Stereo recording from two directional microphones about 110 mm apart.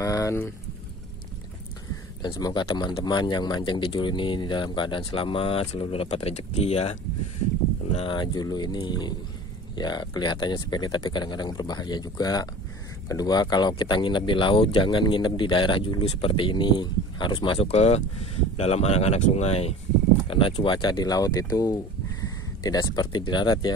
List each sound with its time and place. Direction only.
0.0 s a sound: 30° left (ahead or behind)
2.2 s speech: 45° left (ahead or behind); by 7.0 s 75° left (ahead or behind)
8.1 s speech: 40° left (ahead or behind); by 19.7 s 75° left (ahead or behind)
20.2 s speech: 55° left (ahead or behind)